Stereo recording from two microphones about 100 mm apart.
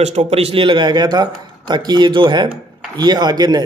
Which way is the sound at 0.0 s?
90° right.